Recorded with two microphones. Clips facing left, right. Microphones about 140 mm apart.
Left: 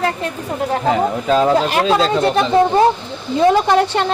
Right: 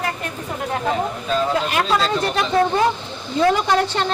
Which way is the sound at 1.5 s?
30° left (ahead or behind).